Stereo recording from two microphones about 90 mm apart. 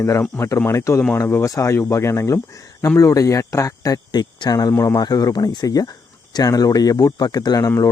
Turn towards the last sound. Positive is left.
turn(degrees=45)  # may be behind; listen again after turning